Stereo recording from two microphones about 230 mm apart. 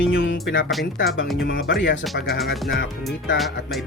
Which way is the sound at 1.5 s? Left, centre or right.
Left.